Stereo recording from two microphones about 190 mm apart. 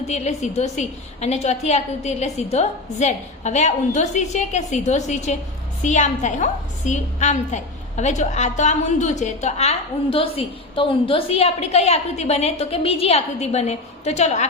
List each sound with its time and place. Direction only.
0.1 s a woman's voice: 35° left (ahead or behind)